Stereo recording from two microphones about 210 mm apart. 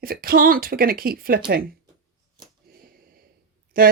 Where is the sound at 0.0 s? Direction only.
45° right (ahead or behind).